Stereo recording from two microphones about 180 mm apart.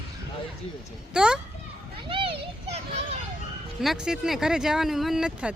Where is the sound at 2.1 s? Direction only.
30° right (ahead or behind).